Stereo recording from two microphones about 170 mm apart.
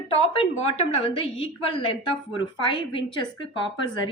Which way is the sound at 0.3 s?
35° left (ahead or behind).